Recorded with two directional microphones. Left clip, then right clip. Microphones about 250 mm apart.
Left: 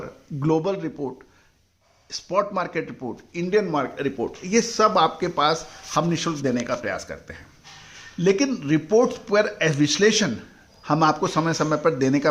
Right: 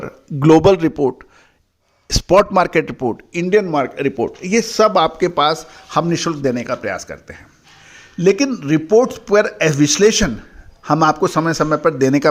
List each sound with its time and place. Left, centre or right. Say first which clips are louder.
0.0 s a man's voice: right 11 dB; right